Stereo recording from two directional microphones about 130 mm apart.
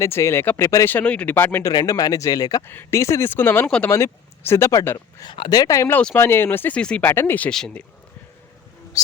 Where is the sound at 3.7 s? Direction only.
5° left (ahead or behind).